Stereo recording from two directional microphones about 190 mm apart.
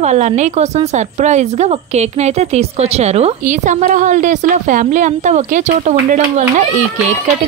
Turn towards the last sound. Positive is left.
turn(degrees=-40)  # may be behind; listen again after turning